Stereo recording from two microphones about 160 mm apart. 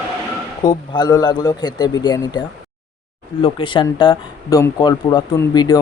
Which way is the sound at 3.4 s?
30° left (ahead or behind).